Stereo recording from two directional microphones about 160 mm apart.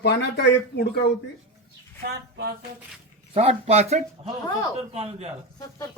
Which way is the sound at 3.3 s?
40° right (ahead or behind).